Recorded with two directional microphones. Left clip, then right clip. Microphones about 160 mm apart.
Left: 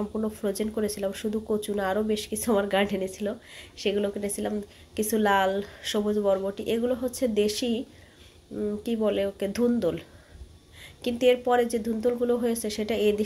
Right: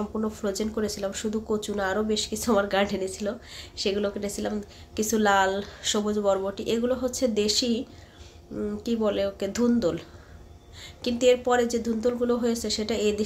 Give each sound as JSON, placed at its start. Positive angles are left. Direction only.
{"t": 0.1, "sound": "speech", "side_deg": 15}